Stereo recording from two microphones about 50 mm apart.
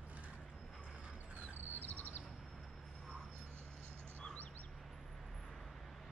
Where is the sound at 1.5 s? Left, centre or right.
Left.